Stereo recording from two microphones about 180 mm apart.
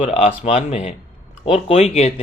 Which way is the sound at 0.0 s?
35° left (ahead or behind).